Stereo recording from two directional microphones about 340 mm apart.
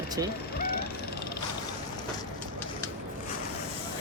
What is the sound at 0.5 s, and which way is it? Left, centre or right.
Vehicle, left.